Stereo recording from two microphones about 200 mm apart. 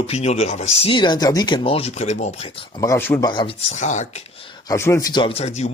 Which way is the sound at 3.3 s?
25° left (ahead or behind).